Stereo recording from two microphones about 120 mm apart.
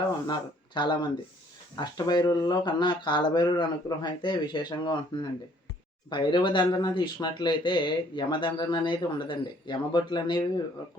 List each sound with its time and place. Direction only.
0.3 s speech: 40° left (ahead or behind)